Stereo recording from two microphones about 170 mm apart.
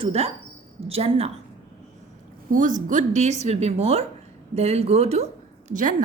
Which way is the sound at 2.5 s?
50° right (ahead or behind).